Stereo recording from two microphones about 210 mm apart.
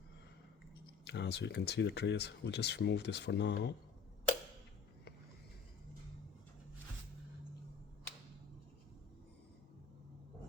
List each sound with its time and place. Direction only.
1.0 s speech: 55° left (ahead or behind)